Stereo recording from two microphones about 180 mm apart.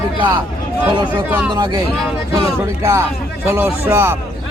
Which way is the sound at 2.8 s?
15° right (ahead or behind).